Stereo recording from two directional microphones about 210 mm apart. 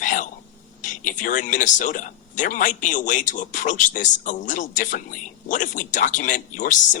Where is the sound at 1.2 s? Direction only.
40° left (ahead or behind).